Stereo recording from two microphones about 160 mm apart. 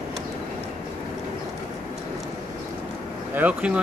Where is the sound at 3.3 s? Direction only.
10° right (ahead or behind).